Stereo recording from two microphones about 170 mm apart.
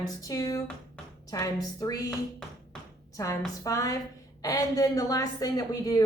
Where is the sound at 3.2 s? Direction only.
20° left (ahead or behind).